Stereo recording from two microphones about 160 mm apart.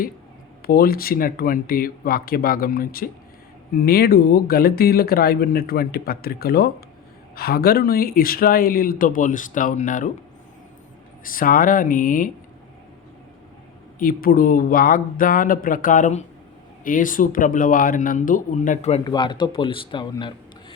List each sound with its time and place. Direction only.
0.7 s speech: 70° left (ahead or behind)
11.2 s speech: 60° left (ahead or behind)
14.0 s speech: 65° left (ahead or behind); by 19.0 s 40° left (ahead or behind)
19.0 s a man's voice: 25° left (ahead or behind)